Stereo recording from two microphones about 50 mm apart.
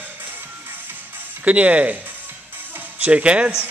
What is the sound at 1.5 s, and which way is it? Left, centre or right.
Speech, right.